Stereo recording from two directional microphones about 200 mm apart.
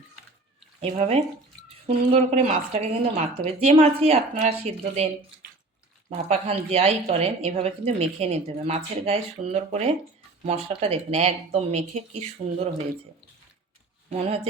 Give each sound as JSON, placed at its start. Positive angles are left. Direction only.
{"t": 0.8, "sound": "a woman's voice", "side_deg": -35}
{"t": 14.1, "sound": "a woman's voice", "side_deg": -30}